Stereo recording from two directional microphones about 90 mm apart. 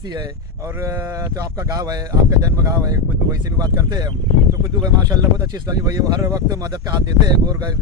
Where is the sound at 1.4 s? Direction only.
40° right (ahead or behind).